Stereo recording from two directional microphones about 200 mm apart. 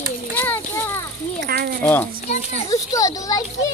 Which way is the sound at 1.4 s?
50° right (ahead or behind).